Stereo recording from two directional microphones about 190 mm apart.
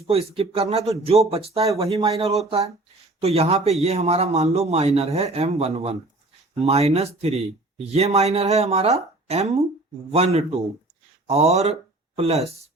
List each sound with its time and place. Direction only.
0.1 s speech: 30° right (ahead or behind)